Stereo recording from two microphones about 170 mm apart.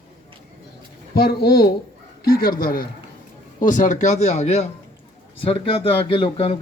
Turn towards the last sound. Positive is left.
turn(degrees=35)  # may be behind; listen again after turning